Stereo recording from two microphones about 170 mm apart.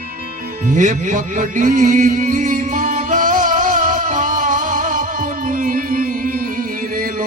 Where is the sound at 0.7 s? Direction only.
45° right (ahead or behind).